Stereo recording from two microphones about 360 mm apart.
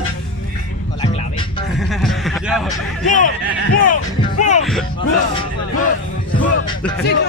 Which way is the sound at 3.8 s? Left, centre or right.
Left.